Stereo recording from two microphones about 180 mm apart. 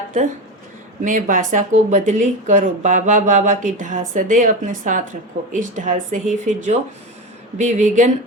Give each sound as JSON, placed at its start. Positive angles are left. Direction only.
{"t": 1.0, "sound": "speech", "side_deg": -45}